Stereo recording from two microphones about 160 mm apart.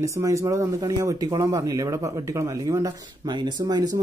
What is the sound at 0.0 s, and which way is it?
Speech, 20° right (ahead or behind).